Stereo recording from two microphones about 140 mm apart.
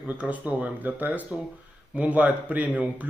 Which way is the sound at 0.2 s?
10° right (ahead or behind).